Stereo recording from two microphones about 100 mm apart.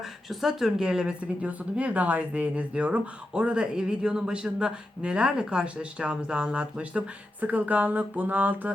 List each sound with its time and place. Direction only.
0.3 s speech: 5° right (ahead or behind)